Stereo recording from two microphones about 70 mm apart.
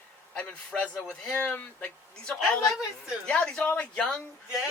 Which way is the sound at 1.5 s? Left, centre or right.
Left.